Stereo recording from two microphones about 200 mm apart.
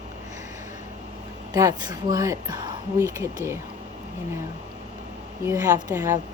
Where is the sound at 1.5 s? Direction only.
20° right (ahead or behind).